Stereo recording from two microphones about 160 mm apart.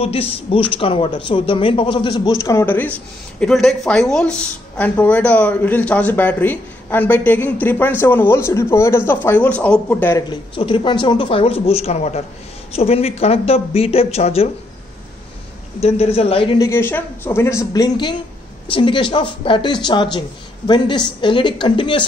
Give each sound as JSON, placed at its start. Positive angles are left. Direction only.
{"t": 0.0, "sound": "speech", "side_deg": 35}
{"t": 2.4, "sound": "speech", "side_deg": 15}
{"t": 10.1, "sound": "speech", "side_deg": 30}
{"t": 15.8, "sound": "speech", "side_deg": 40}
{"t": 16.5, "sound": "a man's voice", "side_deg": 15}